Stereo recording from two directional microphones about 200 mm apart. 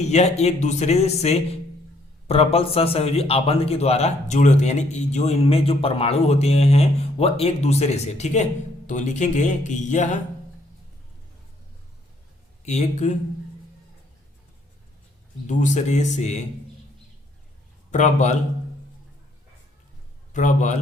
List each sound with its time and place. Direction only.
0.1 s speech: 35° left (ahead or behind)
12.6 s speech: 35° left (ahead or behind)
15.4 s speech: 35° left (ahead or behind)
17.9 s speech: 35° left (ahead or behind)
20.3 s speech: 40° left (ahead or behind)